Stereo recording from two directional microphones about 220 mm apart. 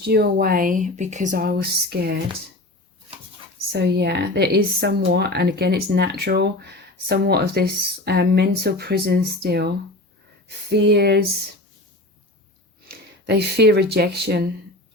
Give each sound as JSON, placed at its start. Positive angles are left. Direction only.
{"t": 0.0, "sound": "speech", "side_deg": -45}
{"t": 3.7, "sound": "speech", "side_deg": -50}
{"t": 10.7, "sound": "speech", "side_deg": -50}
{"t": 12.9, "sound": "speech", "side_deg": -50}